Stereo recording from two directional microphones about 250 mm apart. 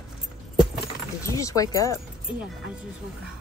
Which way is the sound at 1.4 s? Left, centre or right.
Centre.